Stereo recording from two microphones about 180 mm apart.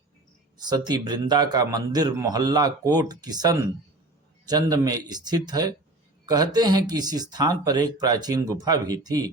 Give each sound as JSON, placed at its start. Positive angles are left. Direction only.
{"t": 0.6, "sound": "speech", "side_deg": -25}